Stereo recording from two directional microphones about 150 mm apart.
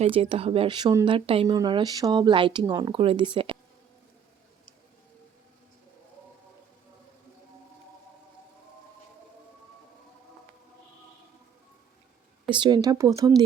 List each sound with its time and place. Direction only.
0.0 s speech: 40° right (ahead or behind)
2.9 s speech: 40° right (ahead or behind)
12.5 s speech: 30° right (ahead or behind)